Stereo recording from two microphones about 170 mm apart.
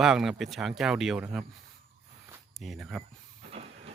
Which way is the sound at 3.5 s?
40° right (ahead or behind).